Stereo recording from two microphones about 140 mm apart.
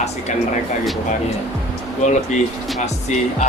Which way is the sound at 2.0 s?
60° left (ahead or behind).